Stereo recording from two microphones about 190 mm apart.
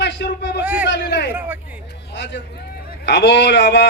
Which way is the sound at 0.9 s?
65° left (ahead or behind).